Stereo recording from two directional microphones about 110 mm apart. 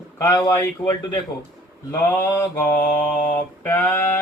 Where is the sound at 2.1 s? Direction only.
25° left (ahead or behind).